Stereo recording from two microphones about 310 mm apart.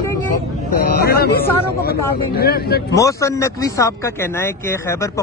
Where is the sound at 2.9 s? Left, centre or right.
Centre.